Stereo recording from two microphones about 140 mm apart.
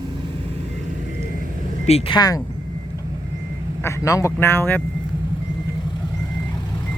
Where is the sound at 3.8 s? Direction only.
20° left (ahead or behind).